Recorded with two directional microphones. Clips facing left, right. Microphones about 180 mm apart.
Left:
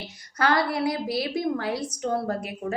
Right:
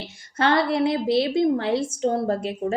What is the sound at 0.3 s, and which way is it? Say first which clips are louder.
A woman's voice: right 3 dB; 25° right (ahead or behind).